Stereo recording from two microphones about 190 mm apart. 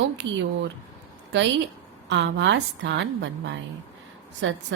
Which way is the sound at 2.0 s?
70° right (ahead or behind).